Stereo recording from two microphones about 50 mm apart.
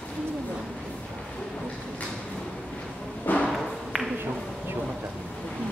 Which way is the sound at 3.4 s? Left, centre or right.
Centre.